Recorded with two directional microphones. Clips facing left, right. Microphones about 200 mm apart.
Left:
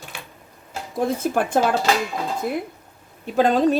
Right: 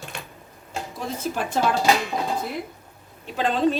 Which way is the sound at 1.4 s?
55° left (ahead or behind).